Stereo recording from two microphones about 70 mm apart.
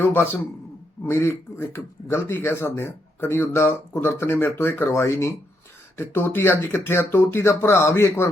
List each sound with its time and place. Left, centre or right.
1.0 s speech: left